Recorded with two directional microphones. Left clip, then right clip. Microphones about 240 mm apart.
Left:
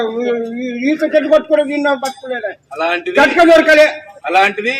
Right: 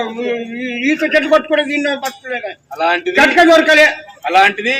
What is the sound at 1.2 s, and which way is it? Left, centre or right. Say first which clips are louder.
Speech: left 3 dB; right.